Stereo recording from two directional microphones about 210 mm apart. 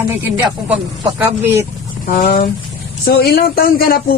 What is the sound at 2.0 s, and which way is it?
Speech, 45° left (ahead or behind).